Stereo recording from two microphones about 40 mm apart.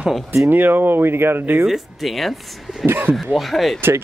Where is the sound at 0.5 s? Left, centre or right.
Right.